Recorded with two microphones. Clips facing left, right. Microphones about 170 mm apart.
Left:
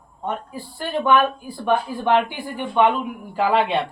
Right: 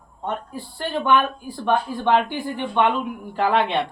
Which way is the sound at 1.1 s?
5° left (ahead or behind).